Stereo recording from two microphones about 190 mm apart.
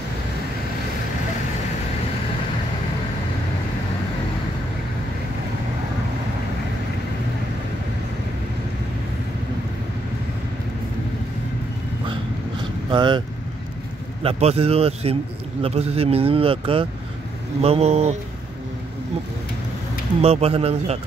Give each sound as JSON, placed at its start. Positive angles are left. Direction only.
{"t": 12.1, "sound": "vehicle", "side_deg": -25}
{"t": 14.2, "sound": "speech", "side_deg": -30}
{"t": 20.2, "sound": "speech", "side_deg": -35}